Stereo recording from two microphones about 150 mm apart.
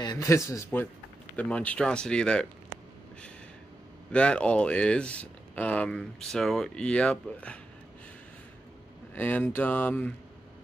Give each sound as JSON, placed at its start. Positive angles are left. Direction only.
{"t": 0.0, "sound": "speech", "side_deg": 25}
{"t": 4.1, "sound": "speech", "side_deg": 5}
{"t": 9.1, "sound": "speech", "side_deg": 10}